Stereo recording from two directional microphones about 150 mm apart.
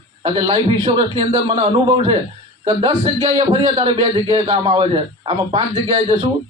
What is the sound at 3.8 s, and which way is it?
A man's voice, 40° right (ahead or behind).